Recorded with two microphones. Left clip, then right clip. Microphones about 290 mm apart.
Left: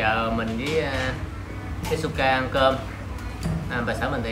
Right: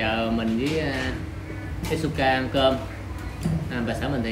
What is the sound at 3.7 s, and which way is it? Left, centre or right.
Speech, centre.